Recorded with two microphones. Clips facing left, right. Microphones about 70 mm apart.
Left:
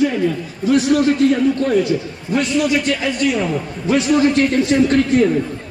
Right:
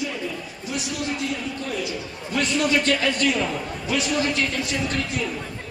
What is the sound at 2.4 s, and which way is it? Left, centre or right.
A man's voice, centre.